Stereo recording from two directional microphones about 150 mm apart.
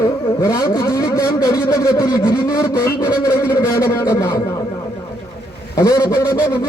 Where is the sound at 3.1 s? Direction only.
20° left (ahead or behind).